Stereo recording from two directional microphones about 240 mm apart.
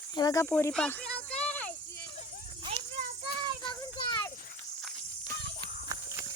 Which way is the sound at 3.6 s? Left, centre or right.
Centre.